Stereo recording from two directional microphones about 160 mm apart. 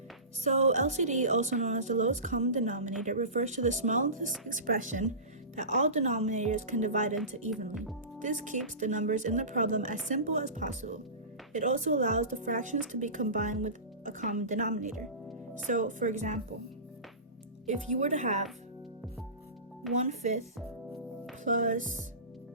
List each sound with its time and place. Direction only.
0.4 s speech: 45° right (ahead or behind)
8.2 s speech: 50° right (ahead or behind)
17.7 s speech: 50° right (ahead or behind)
20.0 s speech: 45° right (ahead or behind)
21.4 s speech: 50° right (ahead or behind)